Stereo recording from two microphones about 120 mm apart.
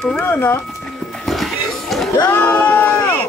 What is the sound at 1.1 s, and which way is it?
Pig, centre (ahead or behind).